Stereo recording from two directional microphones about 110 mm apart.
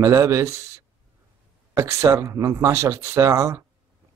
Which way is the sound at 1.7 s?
25° right (ahead or behind).